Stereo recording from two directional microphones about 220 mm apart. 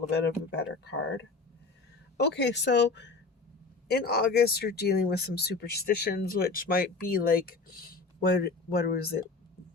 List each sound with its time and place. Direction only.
0.1 s speech: 50° left (ahead or behind)